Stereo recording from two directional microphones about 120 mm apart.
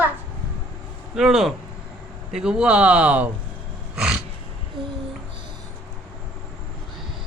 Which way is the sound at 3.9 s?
5° right (ahead or behind).